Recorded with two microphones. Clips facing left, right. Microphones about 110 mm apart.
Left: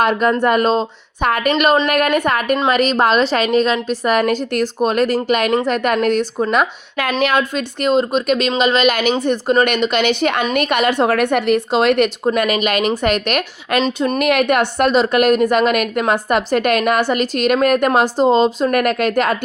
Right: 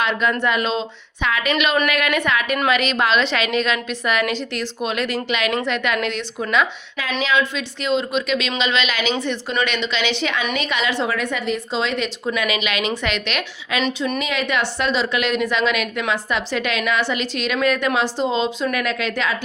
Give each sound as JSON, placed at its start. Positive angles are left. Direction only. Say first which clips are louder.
{"t": 0.0, "sound": "a woman's voice", "louder": "left 6 dB", "side_deg": 45}
{"t": 14.2, "sound": "a woman's voice", "louder": "left 8 dB", "side_deg": 60}